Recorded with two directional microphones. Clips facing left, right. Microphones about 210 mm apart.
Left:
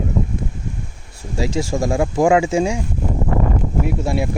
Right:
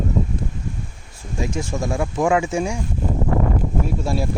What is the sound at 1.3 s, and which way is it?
Speech, 90° left.